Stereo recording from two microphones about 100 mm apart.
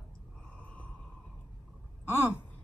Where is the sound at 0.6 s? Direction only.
15° left (ahead or behind).